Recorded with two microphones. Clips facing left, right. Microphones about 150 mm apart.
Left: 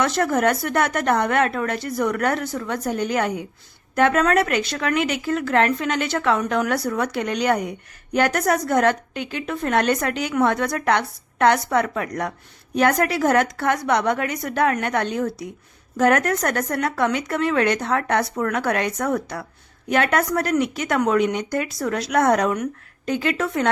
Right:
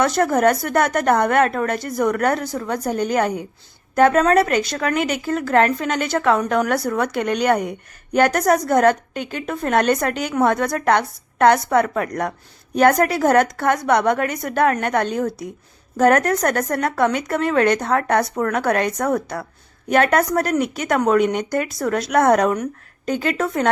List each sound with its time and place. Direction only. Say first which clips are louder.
0.0 s a woman's voice: right 3 dB; 40° right (ahead or behind)
22.5 s speech: right 1 dB; 35° right (ahead or behind)